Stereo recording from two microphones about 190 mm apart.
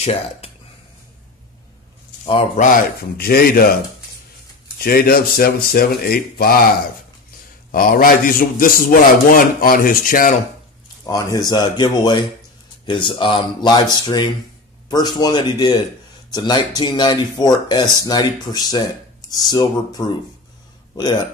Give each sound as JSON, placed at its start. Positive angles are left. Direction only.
{"t": 0.0, "sound": "speech", "side_deg": 30}
{"t": 2.2, "sound": "a man's voice", "side_deg": 35}
{"t": 3.2, "sound": "a man's voice", "side_deg": 55}
{"t": 4.7, "sound": "a man's voice", "side_deg": 50}
{"t": 7.7, "sound": "a man's voice", "side_deg": 50}
{"t": 11.1, "sound": "speech", "side_deg": 20}